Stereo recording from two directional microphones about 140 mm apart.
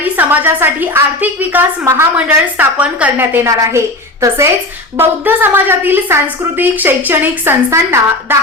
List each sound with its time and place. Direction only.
0.0 s a woman's voice: 15° right (ahead or behind)